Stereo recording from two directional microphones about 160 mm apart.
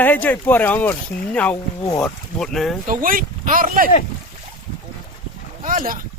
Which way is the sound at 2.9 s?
60° right (ahead or behind).